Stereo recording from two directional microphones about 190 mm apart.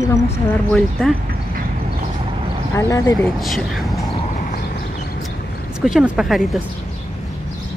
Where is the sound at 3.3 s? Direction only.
Centre (ahead or behind).